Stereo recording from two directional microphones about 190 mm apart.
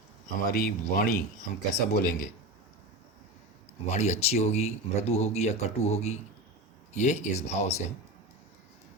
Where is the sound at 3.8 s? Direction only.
35° left (ahead or behind).